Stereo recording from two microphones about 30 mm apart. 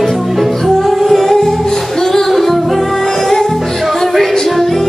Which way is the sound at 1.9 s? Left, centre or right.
Centre.